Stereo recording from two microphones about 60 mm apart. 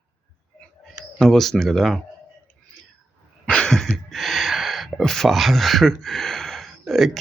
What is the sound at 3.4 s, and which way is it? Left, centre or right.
Cough, left.